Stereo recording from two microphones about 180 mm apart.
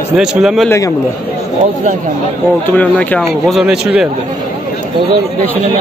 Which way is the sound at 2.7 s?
10° left (ahead or behind).